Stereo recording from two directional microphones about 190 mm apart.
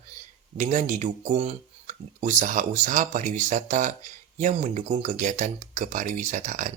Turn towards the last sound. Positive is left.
turn(degrees=-40)  # may be behind; listen again after turning